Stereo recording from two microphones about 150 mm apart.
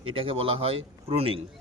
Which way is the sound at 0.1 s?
40° right (ahead or behind).